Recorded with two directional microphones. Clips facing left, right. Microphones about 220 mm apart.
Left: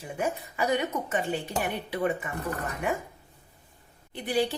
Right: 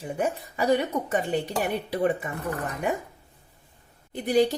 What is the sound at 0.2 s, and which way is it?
A woman's voice, 35° right (ahead or behind).